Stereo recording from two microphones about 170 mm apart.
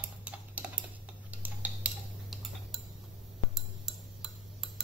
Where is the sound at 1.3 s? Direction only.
10° right (ahead or behind).